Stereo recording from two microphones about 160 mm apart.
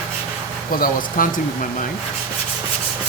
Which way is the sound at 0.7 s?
60° left (ahead or behind).